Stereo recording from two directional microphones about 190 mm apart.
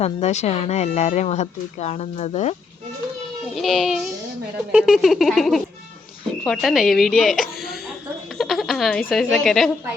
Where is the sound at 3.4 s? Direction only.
Centre (ahead or behind).